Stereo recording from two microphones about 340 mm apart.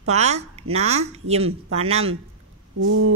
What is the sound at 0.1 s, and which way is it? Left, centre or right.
A woman's voice, centre.